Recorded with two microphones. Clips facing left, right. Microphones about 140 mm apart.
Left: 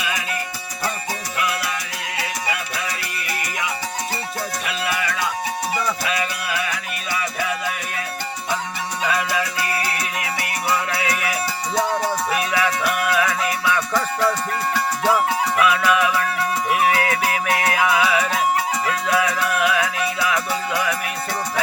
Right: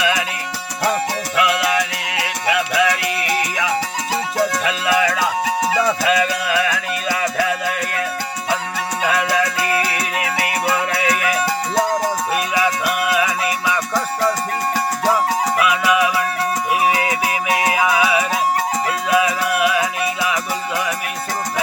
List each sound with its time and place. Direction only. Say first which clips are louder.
0.0 s music: right 8 dB; 90° right
1.4 s music: right 9 dB; 90° right
9.0 s music: right 4 dB; 65° right (ahead or behind)
12.5 s music: right 3 dB; 15° right (ahead or behind)
15.7 s music: right 2 dB; 10° right (ahead or behind)